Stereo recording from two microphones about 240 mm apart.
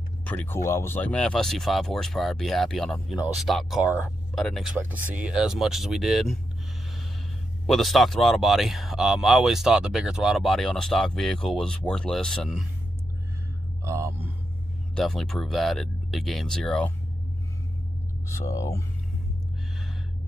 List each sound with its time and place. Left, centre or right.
0.2 s speech: centre
7.6 s speech: centre
13.8 s speech: centre
15.0 s speech: centre
18.4 s speech: centre